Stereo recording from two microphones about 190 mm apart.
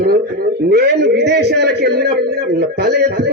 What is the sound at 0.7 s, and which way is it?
A man's voice, 55° right (ahead or behind).